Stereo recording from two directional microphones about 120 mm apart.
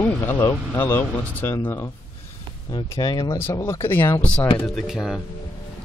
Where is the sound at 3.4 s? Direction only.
20° left (ahead or behind).